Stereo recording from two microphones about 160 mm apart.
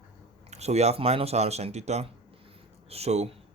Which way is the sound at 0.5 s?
40° right (ahead or behind).